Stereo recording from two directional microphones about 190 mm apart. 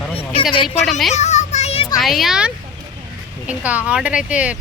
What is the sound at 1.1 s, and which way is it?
Child singing, 35° left (ahead or behind).